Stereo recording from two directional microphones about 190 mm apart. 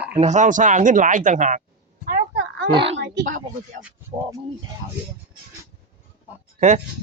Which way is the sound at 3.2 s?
40° right (ahead or behind).